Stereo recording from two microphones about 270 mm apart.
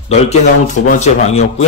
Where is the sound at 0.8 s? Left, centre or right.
Left.